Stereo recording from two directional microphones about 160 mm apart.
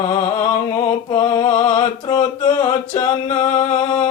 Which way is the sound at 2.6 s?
25° left (ahead or behind).